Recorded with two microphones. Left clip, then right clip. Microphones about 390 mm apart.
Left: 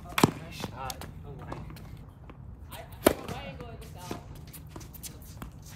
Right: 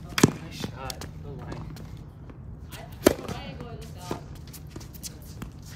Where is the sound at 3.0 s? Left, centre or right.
Centre.